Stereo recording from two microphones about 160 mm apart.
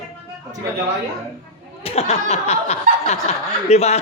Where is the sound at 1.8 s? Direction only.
40° left (ahead or behind).